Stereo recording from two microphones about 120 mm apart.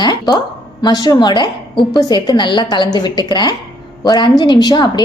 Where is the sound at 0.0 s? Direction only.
35° left (ahead or behind).